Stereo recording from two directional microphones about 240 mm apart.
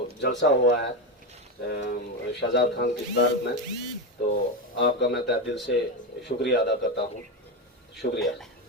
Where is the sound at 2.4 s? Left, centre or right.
Left.